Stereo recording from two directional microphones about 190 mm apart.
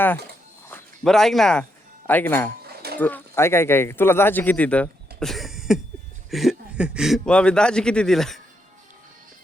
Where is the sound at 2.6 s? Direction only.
55° right (ahead or behind).